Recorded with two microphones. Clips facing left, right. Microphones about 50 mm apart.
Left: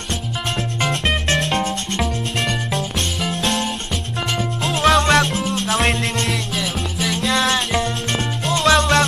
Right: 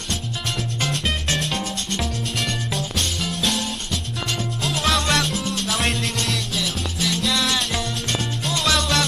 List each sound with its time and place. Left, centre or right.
1.5 s music: left
3.3 s music: left
4.6 s music: left
4.9 s music: left
6.2 s music: centre
7.2 s music: left